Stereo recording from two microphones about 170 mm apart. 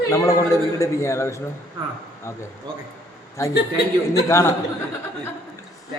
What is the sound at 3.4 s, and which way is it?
A man's voice, 20° left (ahead or behind).